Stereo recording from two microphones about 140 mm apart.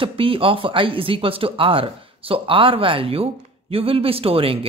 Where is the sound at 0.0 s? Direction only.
40° right (ahead or behind).